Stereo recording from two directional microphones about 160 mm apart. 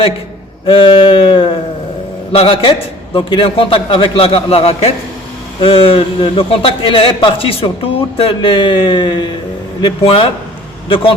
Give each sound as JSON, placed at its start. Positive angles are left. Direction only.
{"t": 0.7, "sound": "a man's voice", "side_deg": 30}